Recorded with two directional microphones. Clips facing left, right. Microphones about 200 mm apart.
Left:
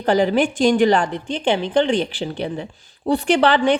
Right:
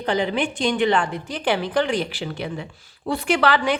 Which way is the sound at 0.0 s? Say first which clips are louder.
Left 6 dB; 45° left (ahead or behind).